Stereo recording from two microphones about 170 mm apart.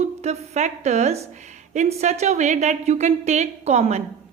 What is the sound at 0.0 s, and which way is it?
A woman's voice, 40° right (ahead or behind).